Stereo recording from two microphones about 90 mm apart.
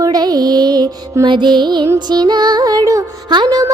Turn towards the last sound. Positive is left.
turn(degrees=-55)  # may be behind; listen again after turning